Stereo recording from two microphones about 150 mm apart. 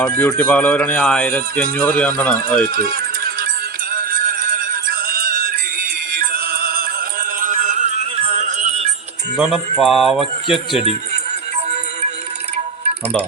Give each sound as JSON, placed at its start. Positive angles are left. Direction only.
{"t": 0.2, "sound": "speech", "side_deg": 10}
{"t": 2.7, "sound": "music", "side_deg": -75}
{"t": 9.4, "sound": "a man's voice", "side_deg": 0}